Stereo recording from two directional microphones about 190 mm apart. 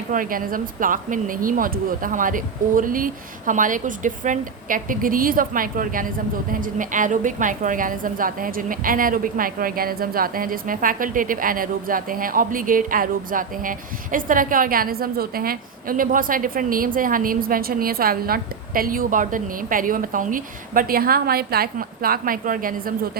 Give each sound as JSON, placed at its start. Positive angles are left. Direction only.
{"t": 0.1, "sound": "speech", "side_deg": -45}